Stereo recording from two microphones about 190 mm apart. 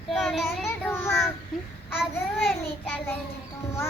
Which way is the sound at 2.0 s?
Centre (ahead or behind).